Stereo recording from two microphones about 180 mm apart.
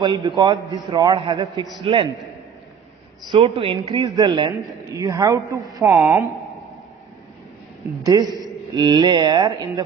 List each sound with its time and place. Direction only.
0.0 s a man's voice: 25° right (ahead or behind)
3.3 s a man's voice: 30° right (ahead or behind)
5.8 s speech: 5° right (ahead or behind)
8.0 s a man's voice: 20° right (ahead or behind)